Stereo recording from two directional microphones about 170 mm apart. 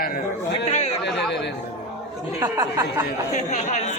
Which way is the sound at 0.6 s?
40° left (ahead or behind).